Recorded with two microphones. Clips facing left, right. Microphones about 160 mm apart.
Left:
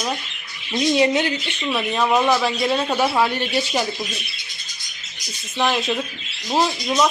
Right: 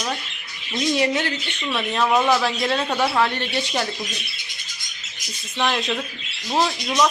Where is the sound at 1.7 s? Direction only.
5° left (ahead or behind).